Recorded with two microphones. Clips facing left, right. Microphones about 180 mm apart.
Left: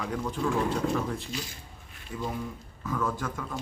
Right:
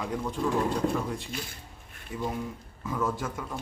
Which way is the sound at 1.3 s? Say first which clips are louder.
Left 1 dB; 55° right (ahead or behind).